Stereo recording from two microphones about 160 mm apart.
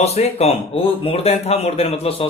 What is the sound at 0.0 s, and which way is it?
Speech, 40° left (ahead or behind).